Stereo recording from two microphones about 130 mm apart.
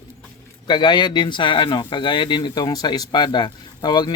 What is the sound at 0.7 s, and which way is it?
Speech, 35° left (ahead or behind).